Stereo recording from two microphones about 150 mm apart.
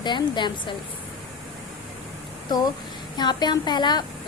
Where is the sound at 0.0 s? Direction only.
30° left (ahead or behind).